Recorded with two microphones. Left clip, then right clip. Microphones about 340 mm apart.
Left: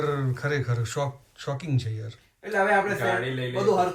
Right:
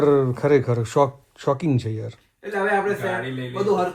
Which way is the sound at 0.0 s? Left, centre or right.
Centre.